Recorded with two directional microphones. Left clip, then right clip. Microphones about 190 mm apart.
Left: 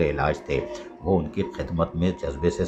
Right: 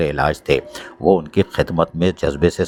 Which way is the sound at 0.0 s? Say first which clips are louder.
Right 5 dB; 40° right (ahead or behind).